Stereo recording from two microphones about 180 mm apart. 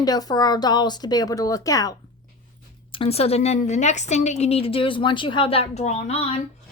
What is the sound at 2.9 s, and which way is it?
A woman's voice, 30° left (ahead or behind).